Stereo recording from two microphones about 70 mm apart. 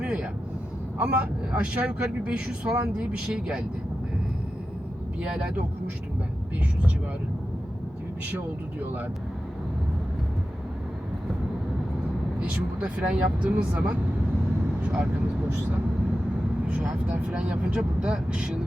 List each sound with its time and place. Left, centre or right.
0.0 s vehicle: centre
0.9 s speech: centre
5.2 s speech: centre
12.4 s speech: centre
14.8 s speech: centre
16.6 s speech: centre